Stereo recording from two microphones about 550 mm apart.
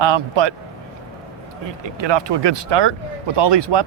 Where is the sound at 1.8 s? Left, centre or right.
Right.